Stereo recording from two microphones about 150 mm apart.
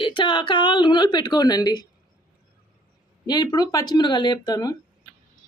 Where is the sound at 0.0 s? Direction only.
35° left (ahead or behind).